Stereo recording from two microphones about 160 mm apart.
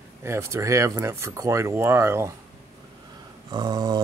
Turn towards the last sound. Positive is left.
turn(degrees=-25)  # may be behind; listen again after turning